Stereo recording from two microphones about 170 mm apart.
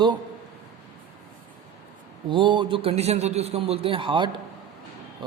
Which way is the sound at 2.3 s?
30° right (ahead or behind).